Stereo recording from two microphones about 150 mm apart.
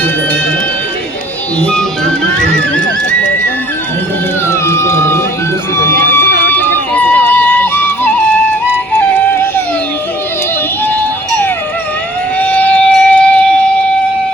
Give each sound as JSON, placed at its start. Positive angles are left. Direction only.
{"t": 4.4, "sound": "dog", "side_deg": 20}
{"t": 5.7, "sound": "a sound", "side_deg": 15}
{"t": 8.9, "sound": "music", "side_deg": 15}
{"t": 12.4, "sound": "siren", "side_deg": 10}